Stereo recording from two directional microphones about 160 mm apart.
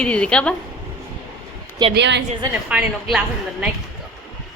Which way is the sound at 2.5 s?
5° right (ahead or behind).